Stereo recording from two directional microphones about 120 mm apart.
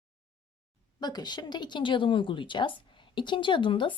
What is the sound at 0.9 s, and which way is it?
A woman's voice, 35° left (ahead or behind).